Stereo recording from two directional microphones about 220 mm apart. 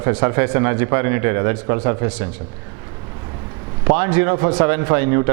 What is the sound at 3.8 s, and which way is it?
Speech, 10° right (ahead or behind).